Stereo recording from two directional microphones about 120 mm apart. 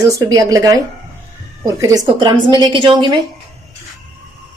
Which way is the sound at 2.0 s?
40° right (ahead or behind).